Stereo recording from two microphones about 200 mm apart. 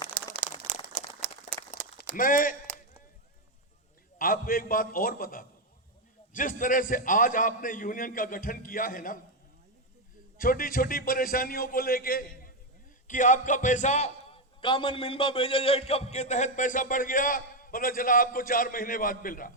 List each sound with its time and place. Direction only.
0.2 s crumpling: 45° right (ahead or behind)
0.7 s a sound: 45° right (ahead or behind)
2.1 s a man's voice: 45° left (ahead or behind)
4.2 s a man's voice: 45° left (ahead or behind)
10.3 s a man's voice: 45° left (ahead or behind)